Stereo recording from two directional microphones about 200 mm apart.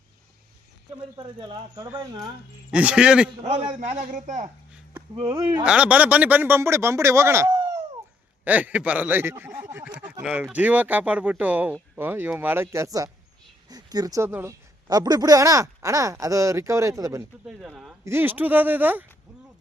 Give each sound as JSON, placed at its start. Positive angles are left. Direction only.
{"t": 1.1, "sound": "speech", "side_deg": -25}
{"t": 2.7, "sound": "speech", "side_deg": -5}
{"t": 3.4, "sound": "a man's voice", "side_deg": -35}
{"t": 5.1, "sound": "speech", "side_deg": -20}
{"t": 5.6, "sound": "speech", "side_deg": -5}
{"t": 17.4, "sound": "speech", "side_deg": -5}